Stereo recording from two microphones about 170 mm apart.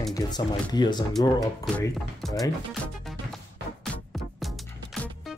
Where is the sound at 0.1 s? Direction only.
25° left (ahead or behind).